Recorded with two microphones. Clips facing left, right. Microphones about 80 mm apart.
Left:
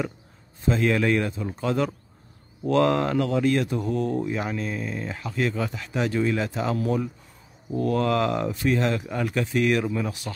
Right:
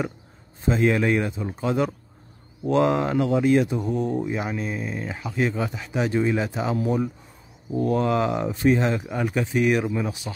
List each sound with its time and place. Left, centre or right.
0.7 s speech: centre